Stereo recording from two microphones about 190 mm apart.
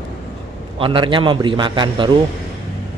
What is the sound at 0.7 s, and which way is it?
Speech, 25° right (ahead or behind).